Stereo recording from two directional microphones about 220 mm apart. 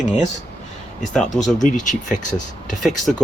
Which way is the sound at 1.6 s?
35° left (ahead or behind).